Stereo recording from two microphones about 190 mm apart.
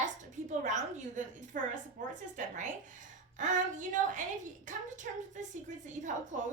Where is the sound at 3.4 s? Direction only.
40° right (ahead or behind).